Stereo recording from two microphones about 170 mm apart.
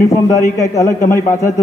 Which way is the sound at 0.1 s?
20° left (ahead or behind).